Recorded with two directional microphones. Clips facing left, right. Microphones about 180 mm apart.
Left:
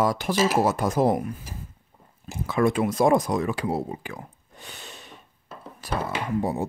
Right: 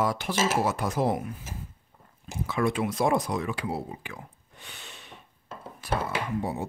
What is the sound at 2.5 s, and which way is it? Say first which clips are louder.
Speech: left 5 dB; 45° left (ahead or behind).